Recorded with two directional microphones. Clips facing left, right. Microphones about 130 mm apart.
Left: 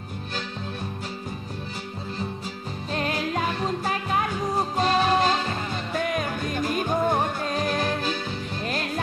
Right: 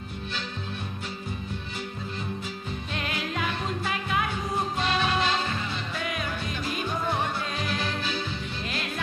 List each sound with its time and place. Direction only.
2.9 s music: 40° left (ahead or behind)